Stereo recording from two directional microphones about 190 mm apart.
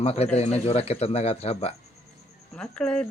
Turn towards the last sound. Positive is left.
turn(degrees=5)  # may be behind; listen again after turning